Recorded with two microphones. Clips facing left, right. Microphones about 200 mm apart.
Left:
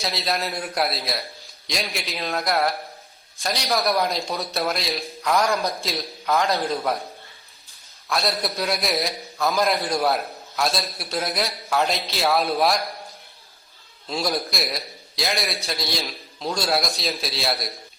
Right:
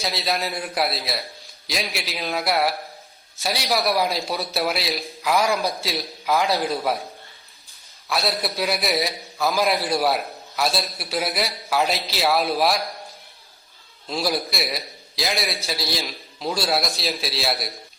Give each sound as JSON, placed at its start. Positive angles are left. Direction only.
{"t": 0.0, "sound": "a man's voice", "side_deg": 0}
{"t": 8.1, "sound": "a man's voice", "side_deg": -5}
{"t": 14.1, "sound": "a man's voice", "side_deg": 0}